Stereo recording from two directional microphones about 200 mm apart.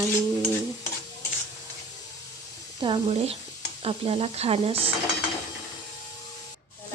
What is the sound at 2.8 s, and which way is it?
A woman's voice, 30° right (ahead or behind).